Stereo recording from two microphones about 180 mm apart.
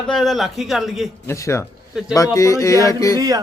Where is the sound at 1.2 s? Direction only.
15° left (ahead or behind).